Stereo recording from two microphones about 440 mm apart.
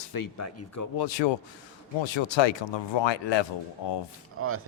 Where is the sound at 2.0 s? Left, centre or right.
Left.